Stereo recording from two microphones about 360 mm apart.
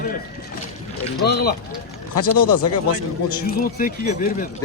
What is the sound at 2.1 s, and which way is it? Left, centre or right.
Speech, left.